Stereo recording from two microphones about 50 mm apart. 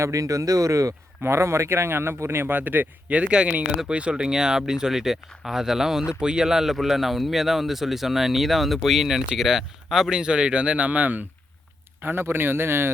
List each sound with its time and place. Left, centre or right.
0.0 s speech: right
1.2 s speech: right
2.5 s speech: right
12.0 s speech: right